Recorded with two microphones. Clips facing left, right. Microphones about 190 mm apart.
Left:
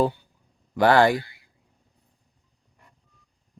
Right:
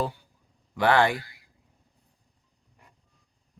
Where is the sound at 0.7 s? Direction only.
40° left (ahead or behind).